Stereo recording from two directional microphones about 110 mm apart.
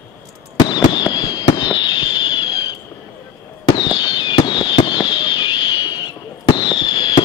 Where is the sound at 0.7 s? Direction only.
45° left (ahead or behind).